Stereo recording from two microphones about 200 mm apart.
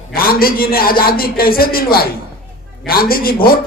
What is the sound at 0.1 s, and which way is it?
A man's voice, 50° left (ahead or behind).